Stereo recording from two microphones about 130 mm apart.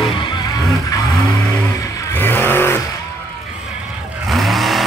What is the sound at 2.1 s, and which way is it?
Vehicle, 15° left (ahead or behind).